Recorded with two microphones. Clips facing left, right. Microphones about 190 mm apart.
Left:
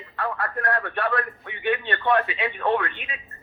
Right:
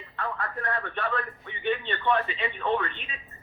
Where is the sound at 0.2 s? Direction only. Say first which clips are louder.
Left 5 dB; 70° left (ahead or behind).